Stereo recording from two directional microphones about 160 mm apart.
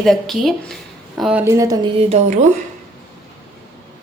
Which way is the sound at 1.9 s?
45° right (ahead or behind).